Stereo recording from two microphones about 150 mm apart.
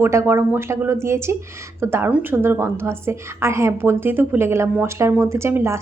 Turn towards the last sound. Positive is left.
turn(degrees=-15)  # may be behind; listen again after turning